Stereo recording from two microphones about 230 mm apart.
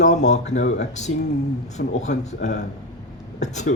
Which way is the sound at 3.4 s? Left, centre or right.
Left.